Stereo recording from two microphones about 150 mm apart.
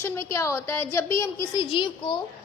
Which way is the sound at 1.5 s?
35° left (ahead or behind).